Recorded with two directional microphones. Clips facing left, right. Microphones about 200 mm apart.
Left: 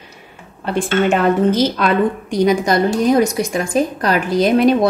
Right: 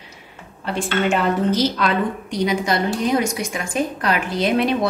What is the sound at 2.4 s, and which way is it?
A woman's voice, 45° left (ahead or behind).